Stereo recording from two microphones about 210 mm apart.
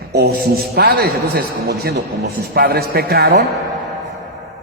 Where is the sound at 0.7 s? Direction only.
50° right (ahead or behind).